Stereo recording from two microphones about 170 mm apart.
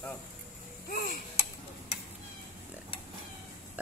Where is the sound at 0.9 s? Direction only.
60° left (ahead or behind).